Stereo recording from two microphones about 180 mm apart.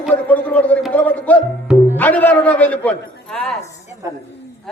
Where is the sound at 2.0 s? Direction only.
10° left (ahead or behind).